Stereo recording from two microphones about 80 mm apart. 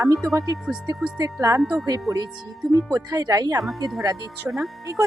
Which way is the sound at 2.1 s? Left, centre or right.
Right.